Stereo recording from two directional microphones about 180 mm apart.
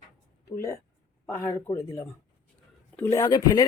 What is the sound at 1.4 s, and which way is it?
A man's voice, 15° left (ahead or behind).